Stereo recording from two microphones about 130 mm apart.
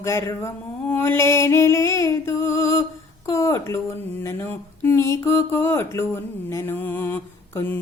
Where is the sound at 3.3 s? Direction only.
20° left (ahead or behind).